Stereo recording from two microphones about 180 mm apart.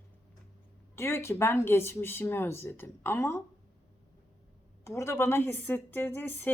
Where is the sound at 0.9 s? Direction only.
15° left (ahead or behind).